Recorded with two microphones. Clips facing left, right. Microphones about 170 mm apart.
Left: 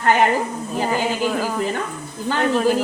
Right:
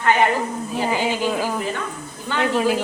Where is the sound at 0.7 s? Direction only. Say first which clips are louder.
Left 1 dB; 10° right (ahead or behind).